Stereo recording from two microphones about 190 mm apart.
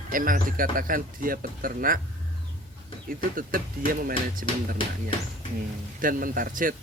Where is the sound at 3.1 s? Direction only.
45° right (ahead or behind).